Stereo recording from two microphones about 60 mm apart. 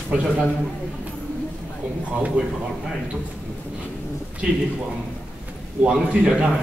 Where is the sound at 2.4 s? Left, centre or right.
Right.